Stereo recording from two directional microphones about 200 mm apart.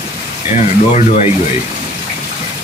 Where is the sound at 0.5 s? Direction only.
35° left (ahead or behind).